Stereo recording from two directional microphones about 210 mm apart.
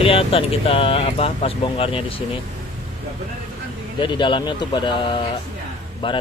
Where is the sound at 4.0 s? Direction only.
20° left (ahead or behind).